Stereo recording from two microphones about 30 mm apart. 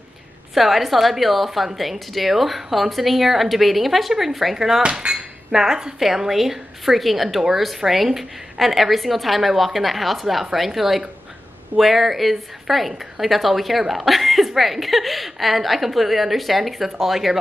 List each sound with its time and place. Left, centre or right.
0.6 s a woman's voice: centre
4.6 s speech: centre
4.9 s dishes: centre
5.9 s a woman's voice: centre